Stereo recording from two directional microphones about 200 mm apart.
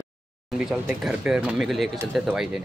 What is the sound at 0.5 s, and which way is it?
Speech, 5° right (ahead or behind).